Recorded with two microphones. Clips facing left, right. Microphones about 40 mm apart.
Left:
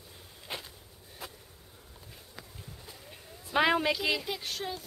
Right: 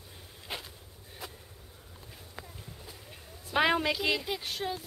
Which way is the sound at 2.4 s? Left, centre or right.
Right.